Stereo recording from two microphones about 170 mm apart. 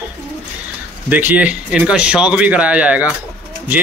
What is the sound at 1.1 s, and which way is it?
A man's voice, 10° right (ahead or behind).